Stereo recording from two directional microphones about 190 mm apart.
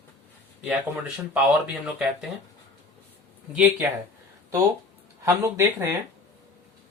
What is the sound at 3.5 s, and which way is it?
Speech, 10° right (ahead or behind).